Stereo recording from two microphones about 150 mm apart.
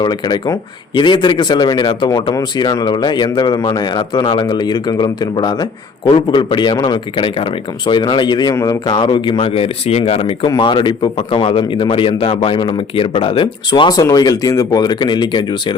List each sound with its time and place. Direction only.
0.0 s speech: 25° left (ahead or behind)